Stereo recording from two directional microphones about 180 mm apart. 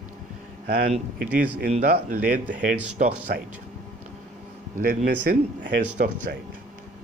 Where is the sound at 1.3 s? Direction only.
50° right (ahead or behind).